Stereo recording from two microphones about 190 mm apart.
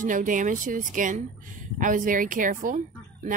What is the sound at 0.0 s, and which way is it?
Speech, 45° right (ahead or behind).